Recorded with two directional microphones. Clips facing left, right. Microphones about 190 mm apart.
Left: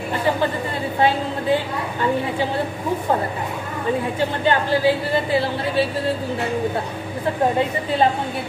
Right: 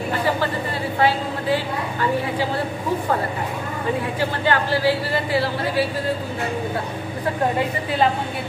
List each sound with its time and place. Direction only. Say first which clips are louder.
4.2 s speech: even; 20° left (ahead or behind)